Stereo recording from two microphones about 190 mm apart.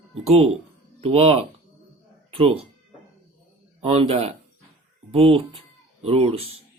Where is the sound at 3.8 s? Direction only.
30° right (ahead or behind).